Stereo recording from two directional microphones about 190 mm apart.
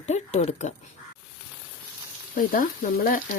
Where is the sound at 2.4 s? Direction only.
45° left (ahead or behind).